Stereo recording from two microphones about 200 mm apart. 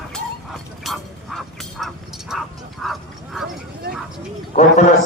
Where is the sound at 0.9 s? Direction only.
Centre (ahead or behind).